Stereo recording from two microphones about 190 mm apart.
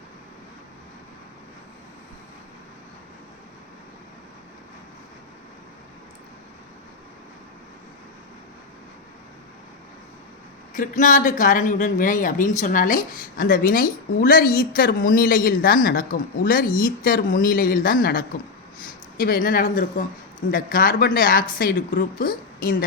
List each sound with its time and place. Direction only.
10.8 s speech: 45° left (ahead or behind)